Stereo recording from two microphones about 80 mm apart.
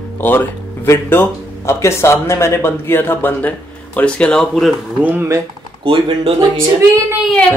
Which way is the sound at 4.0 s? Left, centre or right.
Centre.